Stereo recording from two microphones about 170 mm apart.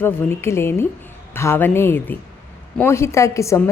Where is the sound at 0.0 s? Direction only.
15° left (ahead or behind).